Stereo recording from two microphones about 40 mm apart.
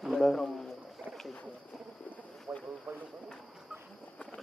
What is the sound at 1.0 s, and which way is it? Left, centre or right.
Boat, left.